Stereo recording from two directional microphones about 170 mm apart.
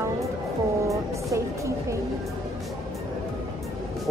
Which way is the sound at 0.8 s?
20° right (ahead or behind).